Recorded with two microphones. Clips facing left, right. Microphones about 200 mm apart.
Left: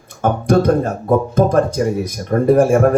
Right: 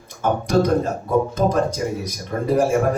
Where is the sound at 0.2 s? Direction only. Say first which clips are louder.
Left 4 dB; 55° left (ahead or behind).